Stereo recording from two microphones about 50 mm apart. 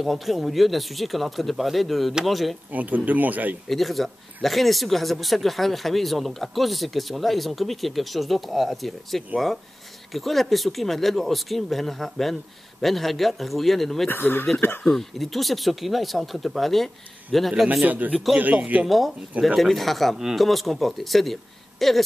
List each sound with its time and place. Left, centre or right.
0.0 s speech: centre
2.7 s speech: right
3.6 s speech: centre
14.0 s speech: left
14.9 s speech: centre
17.8 s speech: right
18.9 s speech: centre